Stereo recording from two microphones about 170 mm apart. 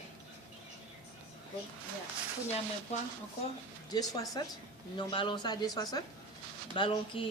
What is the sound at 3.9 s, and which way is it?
A woman's voice, 20° left (ahead or behind).